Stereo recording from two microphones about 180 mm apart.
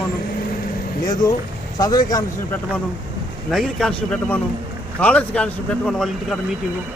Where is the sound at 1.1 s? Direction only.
20° left (ahead or behind).